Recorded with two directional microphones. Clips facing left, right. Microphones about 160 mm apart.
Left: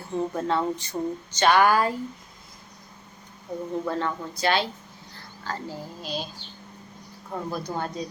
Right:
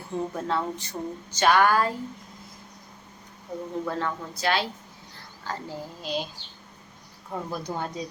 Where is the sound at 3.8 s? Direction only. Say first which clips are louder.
Left 2 dB; centre (ahead or behind).